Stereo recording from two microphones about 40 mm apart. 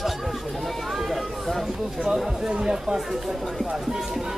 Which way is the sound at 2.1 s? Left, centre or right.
Centre.